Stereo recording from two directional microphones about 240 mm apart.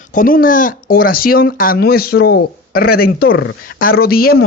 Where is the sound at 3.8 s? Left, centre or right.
Left.